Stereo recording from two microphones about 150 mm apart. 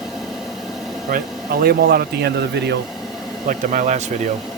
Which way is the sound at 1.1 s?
85° right.